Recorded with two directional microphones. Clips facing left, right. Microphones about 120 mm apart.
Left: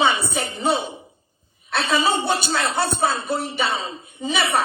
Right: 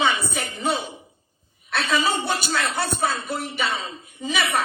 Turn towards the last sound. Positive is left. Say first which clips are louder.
# left 2 dB
turn(degrees=30)  # may be behind; listen again after turning